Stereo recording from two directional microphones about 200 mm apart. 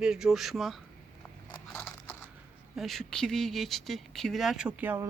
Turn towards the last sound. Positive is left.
turn(degrees=-10)  # may be behind; listen again after turning